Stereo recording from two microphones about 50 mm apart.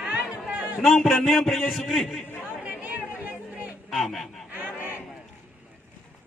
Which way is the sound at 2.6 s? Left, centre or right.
Right.